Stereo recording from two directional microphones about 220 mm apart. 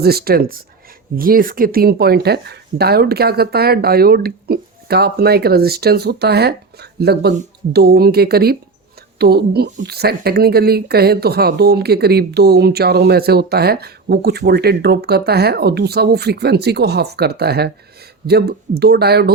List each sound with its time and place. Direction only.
0.0 s speech: 45° right (ahead or behind)